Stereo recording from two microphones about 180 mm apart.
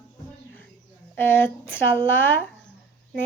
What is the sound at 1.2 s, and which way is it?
A child's voice, 10° left (ahead or behind).